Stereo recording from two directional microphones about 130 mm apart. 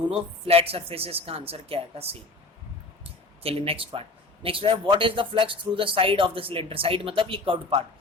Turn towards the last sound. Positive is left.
turn(degrees=-45)  # may be behind; listen again after turning